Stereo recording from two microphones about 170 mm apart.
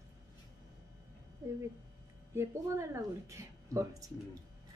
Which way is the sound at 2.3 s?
15° right (ahead or behind).